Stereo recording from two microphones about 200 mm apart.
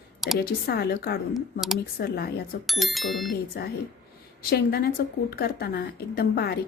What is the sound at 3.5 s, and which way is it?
A woman's voice, 50° left (ahead or behind).